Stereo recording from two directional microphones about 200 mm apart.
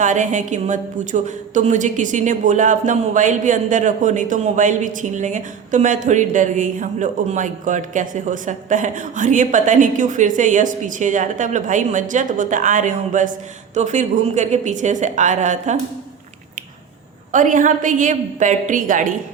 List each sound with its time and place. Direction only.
0.0 s a woman's voice: 40° right (ahead or behind)
17.3 s a woman's voice: 40° right (ahead or behind)